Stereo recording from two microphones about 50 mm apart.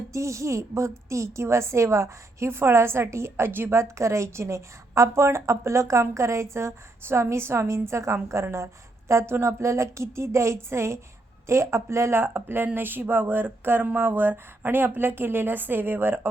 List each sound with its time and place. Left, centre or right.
0.1 s a woman's voice: right
3.5 s a woman's voice: right
12.2 s a woman's voice: right